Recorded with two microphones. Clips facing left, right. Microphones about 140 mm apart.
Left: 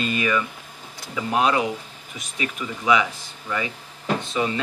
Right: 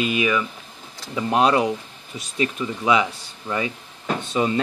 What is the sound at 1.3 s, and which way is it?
Speech, 40° right (ahead or behind).